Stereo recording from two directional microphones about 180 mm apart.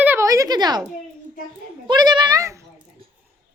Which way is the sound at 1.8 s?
25° right (ahead or behind).